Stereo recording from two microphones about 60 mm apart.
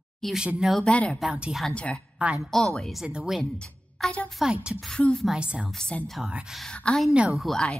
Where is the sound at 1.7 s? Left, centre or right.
Centre.